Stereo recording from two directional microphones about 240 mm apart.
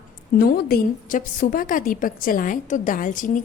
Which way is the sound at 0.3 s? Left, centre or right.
Left.